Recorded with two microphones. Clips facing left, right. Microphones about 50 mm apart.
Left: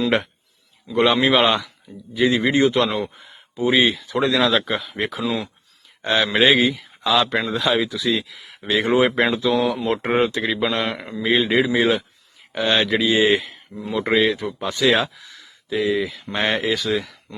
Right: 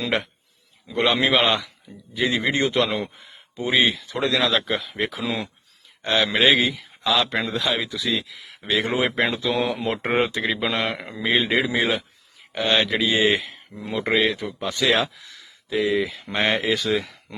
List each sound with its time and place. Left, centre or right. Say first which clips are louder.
1.1 s speech: left 1 dB; centre
6.0 s speech: left 2 dB; left
6.2 s speech: left 3 dB; centre